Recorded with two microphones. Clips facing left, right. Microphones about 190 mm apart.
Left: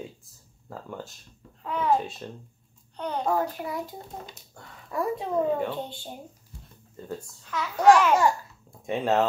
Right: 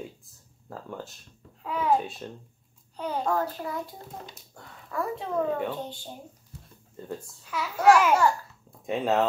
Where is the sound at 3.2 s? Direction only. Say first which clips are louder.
Left 3 dB; 15° left (ahead or behind).